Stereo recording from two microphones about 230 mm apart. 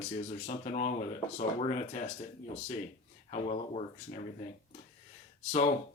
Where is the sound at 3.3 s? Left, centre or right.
Left.